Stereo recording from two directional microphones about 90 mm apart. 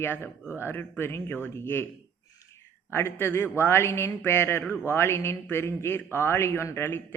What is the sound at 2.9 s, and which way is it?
A man's voice, 25° left (ahead or behind).